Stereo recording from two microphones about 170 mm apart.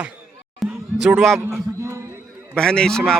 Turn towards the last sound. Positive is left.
turn(degrees=5)  # may be behind; listen again after turning